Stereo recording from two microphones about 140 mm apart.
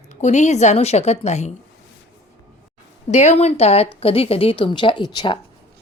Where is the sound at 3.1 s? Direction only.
55° left (ahead or behind).